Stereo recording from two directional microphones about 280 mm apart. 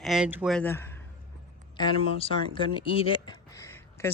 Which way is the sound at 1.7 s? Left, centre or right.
Centre.